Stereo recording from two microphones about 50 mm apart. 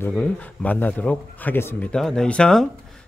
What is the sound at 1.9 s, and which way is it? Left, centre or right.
Speech, centre.